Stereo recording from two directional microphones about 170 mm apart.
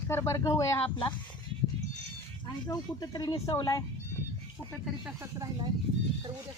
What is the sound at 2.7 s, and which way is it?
Speech, 20° left (ahead or behind).